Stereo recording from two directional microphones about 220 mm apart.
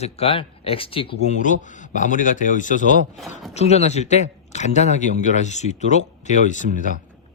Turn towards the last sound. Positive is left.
turn(degrees=35)  # may be behind; listen again after turning